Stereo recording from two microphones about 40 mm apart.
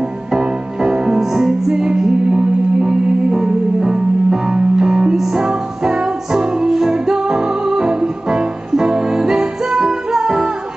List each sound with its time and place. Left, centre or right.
0.3 s music: centre